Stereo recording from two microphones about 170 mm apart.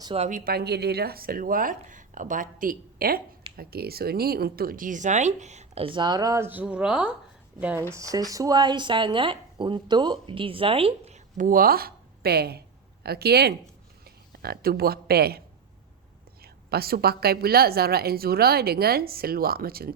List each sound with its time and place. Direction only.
0.0 s speech: 35° right (ahead or behind)
0.3 s a woman's voice: 55° right (ahead or behind)
16.4 s a woman's voice: 65° right (ahead or behind)